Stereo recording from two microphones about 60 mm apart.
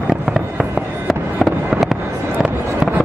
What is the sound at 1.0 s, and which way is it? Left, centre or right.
Fireworks, centre.